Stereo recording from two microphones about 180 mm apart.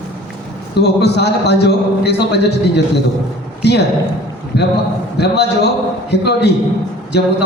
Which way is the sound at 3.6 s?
65° left (ahead or behind).